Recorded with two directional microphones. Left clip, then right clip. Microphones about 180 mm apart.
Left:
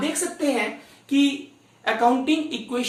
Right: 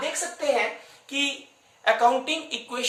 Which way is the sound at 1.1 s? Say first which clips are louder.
Left 5 dB; 25° right (ahead or behind).